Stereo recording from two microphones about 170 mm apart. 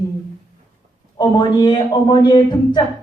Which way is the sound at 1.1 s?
25° left (ahead or behind).